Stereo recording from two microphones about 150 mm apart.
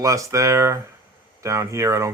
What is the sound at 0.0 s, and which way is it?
Speech, 20° right (ahead or behind).